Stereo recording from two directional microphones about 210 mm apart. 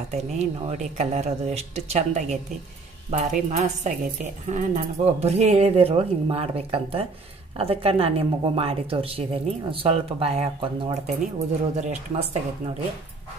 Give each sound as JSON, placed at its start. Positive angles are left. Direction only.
{"t": 0.1, "sound": "speech", "side_deg": -30}